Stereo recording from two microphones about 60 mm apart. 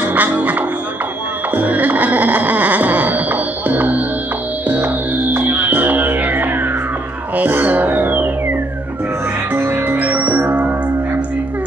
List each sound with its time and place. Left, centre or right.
0.1 s music: right
1.5 s a sound: right
4.6 s music: right